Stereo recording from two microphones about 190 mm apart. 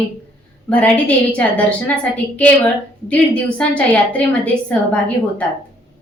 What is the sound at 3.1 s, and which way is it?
A woman's voice, 5° left (ahead or behind).